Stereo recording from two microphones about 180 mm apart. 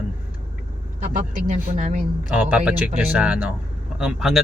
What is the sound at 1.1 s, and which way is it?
Speech, 45° right (ahead or behind).